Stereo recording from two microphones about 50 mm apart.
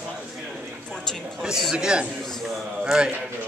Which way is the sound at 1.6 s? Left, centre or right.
Centre.